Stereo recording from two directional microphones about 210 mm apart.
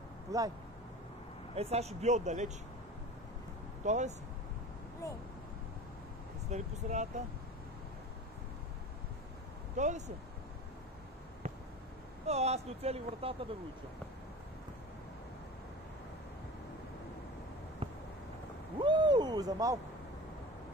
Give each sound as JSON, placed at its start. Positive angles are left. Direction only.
{"t": 0.3, "sound": "speech", "side_deg": -15}
{"t": 1.5, "sound": "speech", "side_deg": -30}
{"t": 3.8, "sound": "speech", "side_deg": -35}
{"t": 5.0, "sound": "speech", "side_deg": 15}
{"t": 6.5, "sound": "speech", "side_deg": -35}
{"t": 9.8, "sound": "speech", "side_deg": -35}
{"t": 12.3, "sound": "speech", "side_deg": -30}
{"t": 17.8, "sound": "a sound", "side_deg": -25}